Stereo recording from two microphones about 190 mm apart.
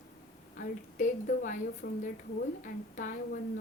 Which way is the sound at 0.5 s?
45° left (ahead or behind).